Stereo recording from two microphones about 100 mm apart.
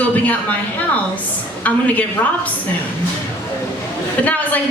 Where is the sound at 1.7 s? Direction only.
15° left (ahead or behind).